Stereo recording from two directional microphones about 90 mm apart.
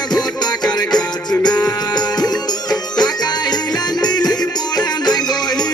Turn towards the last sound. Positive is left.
turn(degrees=50)  # may be behind; listen again after turning